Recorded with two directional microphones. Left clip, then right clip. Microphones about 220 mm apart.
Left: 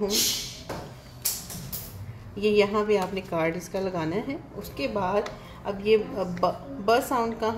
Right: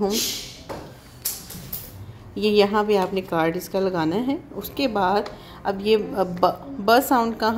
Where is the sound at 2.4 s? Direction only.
35° right (ahead or behind).